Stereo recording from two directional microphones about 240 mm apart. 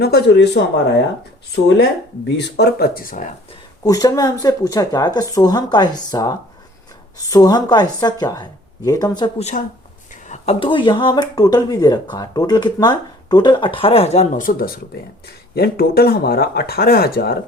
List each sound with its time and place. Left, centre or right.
0.0 s speech: left
3.8 s a woman's voice: centre; by 17.3 s left